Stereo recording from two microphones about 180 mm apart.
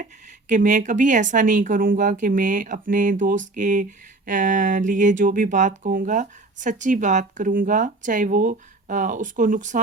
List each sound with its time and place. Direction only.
0.0 s speech: 45° right (ahead or behind)